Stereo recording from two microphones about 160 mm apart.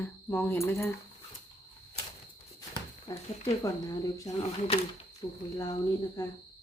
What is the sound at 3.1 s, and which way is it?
Speech, 20° left (ahead or behind).